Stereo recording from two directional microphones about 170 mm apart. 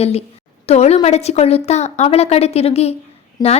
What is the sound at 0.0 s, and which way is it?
A woman's voice, 35° left (ahead or behind).